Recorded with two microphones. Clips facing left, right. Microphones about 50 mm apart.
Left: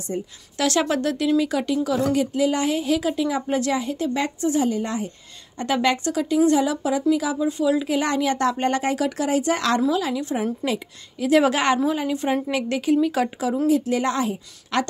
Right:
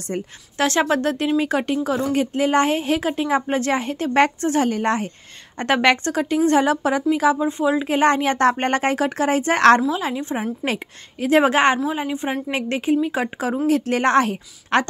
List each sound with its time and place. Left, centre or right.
0.1 s a woman's voice: right
0.6 s a woman's voice: right
9.8 s a woman's voice: right
12.4 s speech: right
12.9 s a woman's voice: right
13.7 s a woman's voice: right
14.7 s speech: right